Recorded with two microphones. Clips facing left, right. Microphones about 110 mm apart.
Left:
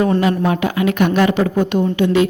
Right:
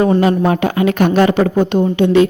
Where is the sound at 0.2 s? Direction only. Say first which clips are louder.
Right 3 dB; 35° right (ahead or behind).